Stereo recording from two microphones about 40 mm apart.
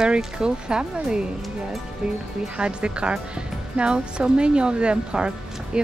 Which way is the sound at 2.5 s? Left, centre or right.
Right.